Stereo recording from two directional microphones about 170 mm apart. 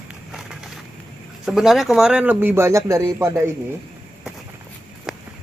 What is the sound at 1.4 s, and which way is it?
Speech, centre (ahead or behind).